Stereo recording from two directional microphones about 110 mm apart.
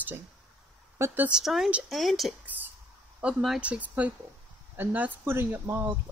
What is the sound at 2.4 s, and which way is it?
Speech, 15° right (ahead or behind).